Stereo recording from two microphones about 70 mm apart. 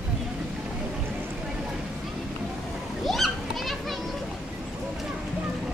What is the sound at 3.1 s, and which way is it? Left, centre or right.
Children playing, centre.